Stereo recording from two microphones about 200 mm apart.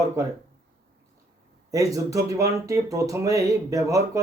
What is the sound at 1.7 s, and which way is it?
Speech, 15° right (ahead or behind).